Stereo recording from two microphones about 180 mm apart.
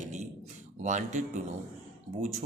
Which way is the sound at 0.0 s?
40° right (ahead or behind).